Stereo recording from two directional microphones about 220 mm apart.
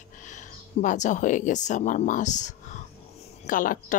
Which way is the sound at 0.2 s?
35° left (ahead or behind).